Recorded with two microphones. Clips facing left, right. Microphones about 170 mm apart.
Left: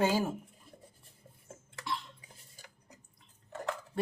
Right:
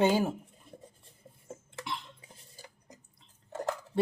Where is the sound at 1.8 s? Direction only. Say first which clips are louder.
Left 2 dB; 25° right (ahead or behind).